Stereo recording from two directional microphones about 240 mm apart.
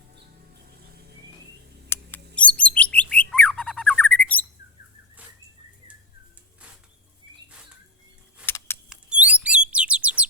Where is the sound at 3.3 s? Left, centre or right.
Centre.